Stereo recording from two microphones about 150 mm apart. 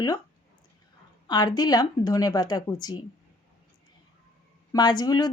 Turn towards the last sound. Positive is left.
turn(degrees=25)  # may be behind; listen again after turning